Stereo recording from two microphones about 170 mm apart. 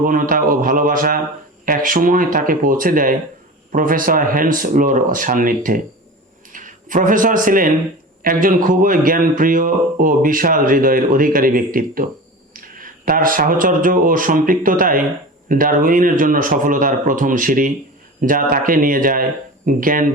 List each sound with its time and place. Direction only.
0.0 s a man's voice: 55° right (ahead or behind)